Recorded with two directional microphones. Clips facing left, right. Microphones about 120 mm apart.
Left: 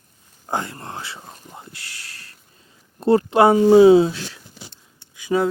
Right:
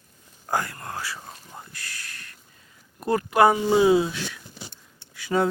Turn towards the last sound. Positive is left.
turn(degrees=0)  # may be behind; listen again after turning